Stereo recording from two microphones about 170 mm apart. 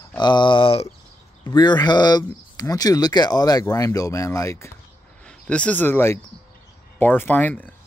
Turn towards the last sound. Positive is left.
turn(degrees=10)  # may be behind; listen again after turning